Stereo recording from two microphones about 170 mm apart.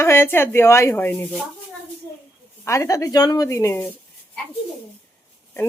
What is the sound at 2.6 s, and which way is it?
Speech, 20° left (ahead or behind).